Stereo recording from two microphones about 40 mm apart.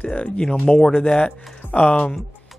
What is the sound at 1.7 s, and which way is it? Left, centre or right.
Speech, left.